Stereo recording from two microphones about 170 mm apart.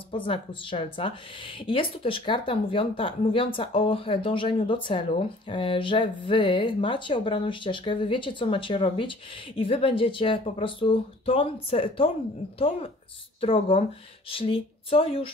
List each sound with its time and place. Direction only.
0.1 s speech: 30° left (ahead or behind)